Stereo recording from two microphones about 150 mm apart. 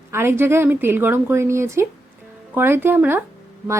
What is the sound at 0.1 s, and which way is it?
Speech, 15° right (ahead or behind).